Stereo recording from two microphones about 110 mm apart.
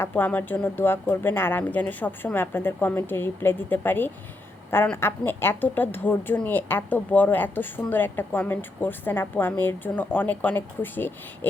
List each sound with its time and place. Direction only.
0.0 s a woman's voice: 15° left (ahead or behind)